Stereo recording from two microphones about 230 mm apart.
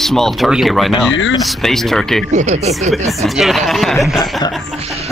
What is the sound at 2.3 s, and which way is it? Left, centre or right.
Speech, right.